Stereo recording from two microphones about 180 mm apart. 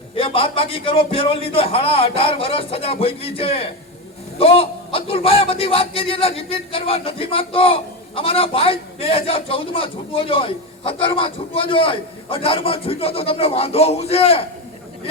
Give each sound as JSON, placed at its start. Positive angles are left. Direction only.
{"t": 0.2, "sound": "a man's voice", "side_deg": 30}